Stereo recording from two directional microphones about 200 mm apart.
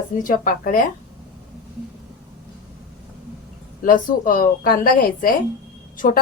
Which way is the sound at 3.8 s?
45° left (ahead or behind).